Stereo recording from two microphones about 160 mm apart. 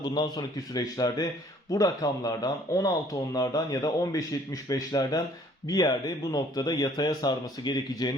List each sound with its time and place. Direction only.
0.0 s speech: 25° left (ahead or behind)